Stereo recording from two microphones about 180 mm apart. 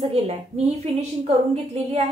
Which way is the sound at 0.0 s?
35° right (ahead or behind).